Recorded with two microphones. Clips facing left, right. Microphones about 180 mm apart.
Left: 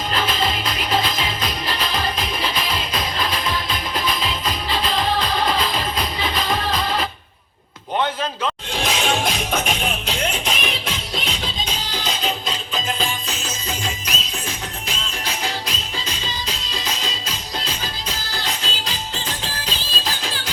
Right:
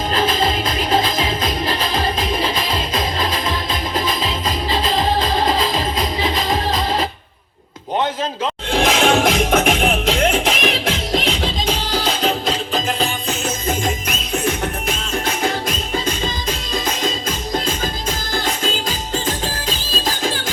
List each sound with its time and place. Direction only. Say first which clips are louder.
0.1 s music: right 4 dB; 45° right (ahead or behind)
2.1 s music: right 5 dB; 25° right (ahead or behind)
4.7 s music: right 3 dB; 40° right (ahead or behind)
8.7 s music: right 9 dB; 55° right (ahead or behind)